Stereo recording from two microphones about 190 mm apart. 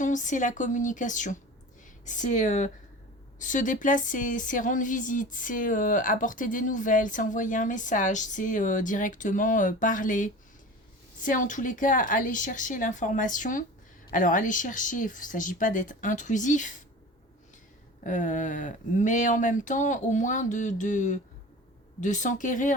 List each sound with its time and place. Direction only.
0.0 s speech: 40° left (ahead or behind)
18.0 s speech: 40° left (ahead or behind)